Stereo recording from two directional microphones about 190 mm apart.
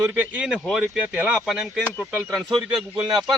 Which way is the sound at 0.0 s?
10° right (ahead or behind).